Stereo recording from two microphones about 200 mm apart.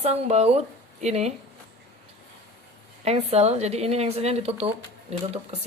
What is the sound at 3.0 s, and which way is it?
Speech, 30° right (ahead or behind).